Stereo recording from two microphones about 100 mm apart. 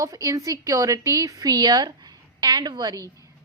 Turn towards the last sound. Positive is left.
turn(degrees=-35)  # may be behind; listen again after turning